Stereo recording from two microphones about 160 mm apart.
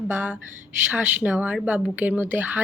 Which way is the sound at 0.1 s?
10° right (ahead or behind).